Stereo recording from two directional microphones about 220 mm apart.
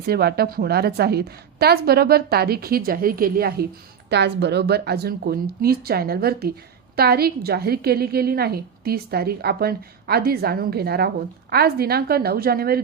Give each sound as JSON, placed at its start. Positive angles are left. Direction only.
{"t": 0.1, "sound": "a woman's voice", "side_deg": -45}